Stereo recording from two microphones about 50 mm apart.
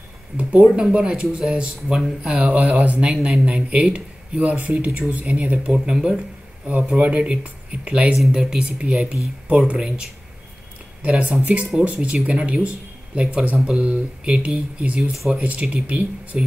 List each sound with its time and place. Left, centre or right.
0.4 s speech: right
3.1 s speech: centre
3.4 s speech: right